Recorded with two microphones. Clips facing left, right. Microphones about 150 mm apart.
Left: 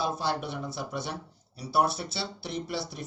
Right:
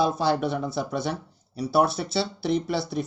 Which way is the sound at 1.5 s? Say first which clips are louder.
Right 5 dB; 75° right (ahead or behind).